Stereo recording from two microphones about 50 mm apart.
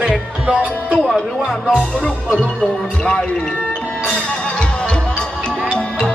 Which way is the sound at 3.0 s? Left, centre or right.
Centre.